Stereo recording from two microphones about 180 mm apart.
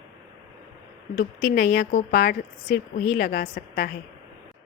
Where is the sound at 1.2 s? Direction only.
65° left (ahead or behind).